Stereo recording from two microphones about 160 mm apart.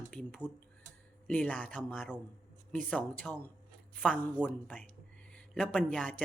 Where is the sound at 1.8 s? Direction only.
5° right (ahead or behind).